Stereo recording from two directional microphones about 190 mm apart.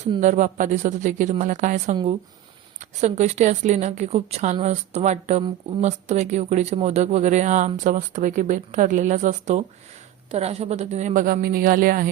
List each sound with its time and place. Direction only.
0.0 s speech: 35° right (ahead or behind)
3.0 s a woman's voice: 35° right (ahead or behind)